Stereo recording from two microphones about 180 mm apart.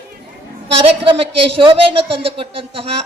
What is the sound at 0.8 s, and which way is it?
A man's voice, 30° right (ahead or behind).